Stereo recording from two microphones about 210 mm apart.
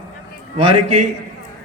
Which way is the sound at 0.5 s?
30° right (ahead or behind).